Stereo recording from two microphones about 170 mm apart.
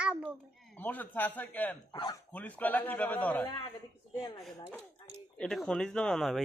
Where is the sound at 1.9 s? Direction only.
25° left (ahead or behind).